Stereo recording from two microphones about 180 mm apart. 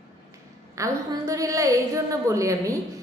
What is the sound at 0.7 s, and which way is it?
A woman's voice, 15° right (ahead or behind).